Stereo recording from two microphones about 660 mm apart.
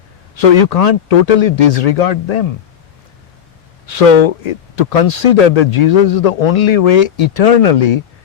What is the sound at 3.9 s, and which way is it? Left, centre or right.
Speech, left.